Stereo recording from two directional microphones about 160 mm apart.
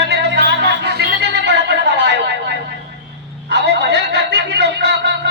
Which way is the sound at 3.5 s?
90° right.